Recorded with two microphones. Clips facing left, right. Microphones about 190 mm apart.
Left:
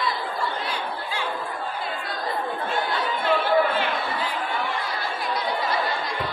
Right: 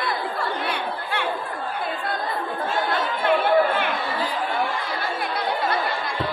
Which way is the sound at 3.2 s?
60° right (ahead or behind).